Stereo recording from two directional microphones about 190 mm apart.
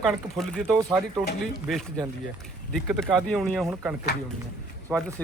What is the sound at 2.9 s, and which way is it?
Speech, 5° right (ahead or behind).